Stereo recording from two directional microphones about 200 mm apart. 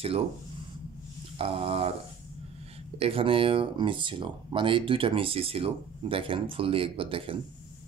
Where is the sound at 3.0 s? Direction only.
30° right (ahead or behind).